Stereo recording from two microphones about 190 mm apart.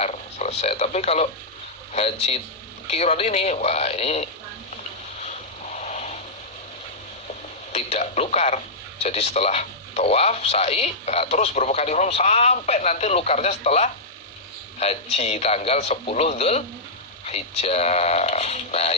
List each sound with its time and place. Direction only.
0.0 s frog: 35° left (ahead or behind)
1.9 s speech: 35° left (ahead or behind)
5.7 s vehicle: 35° left (ahead or behind)
7.7 s speech: 35° left (ahead or behind)